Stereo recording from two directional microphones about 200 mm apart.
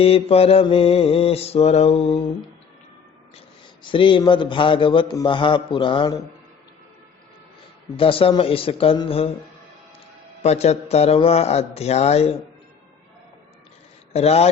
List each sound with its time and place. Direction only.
0.0 s a man's voice: 30° left (ahead or behind)
3.8 s a man's voice: 25° left (ahead or behind)
7.9 s a man's voice: 25° left (ahead or behind)
10.4 s speech: 30° left (ahead or behind)
14.1 s speech: 30° left (ahead or behind)